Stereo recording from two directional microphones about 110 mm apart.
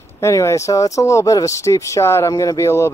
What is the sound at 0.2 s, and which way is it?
Speech, 25° left (ahead or behind).